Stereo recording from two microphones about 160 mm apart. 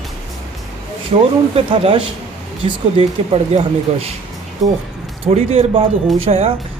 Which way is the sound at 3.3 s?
40° right (ahead or behind).